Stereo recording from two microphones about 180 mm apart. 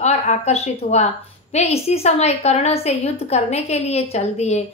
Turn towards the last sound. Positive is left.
turn(degrees=35)  # may be behind; listen again after turning